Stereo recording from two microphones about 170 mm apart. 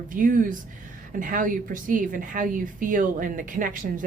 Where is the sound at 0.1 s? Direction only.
50° right (ahead or behind).